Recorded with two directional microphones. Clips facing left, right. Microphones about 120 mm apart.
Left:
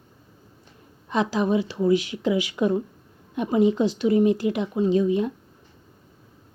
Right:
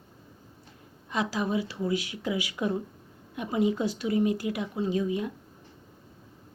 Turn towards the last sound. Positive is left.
turn(degrees=25)  # may be behind; listen again after turning